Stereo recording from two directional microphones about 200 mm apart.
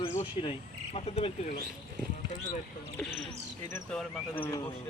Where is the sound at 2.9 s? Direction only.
Centre (ahead or behind).